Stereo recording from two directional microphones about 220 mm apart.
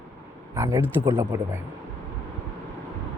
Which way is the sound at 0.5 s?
15° right (ahead or behind).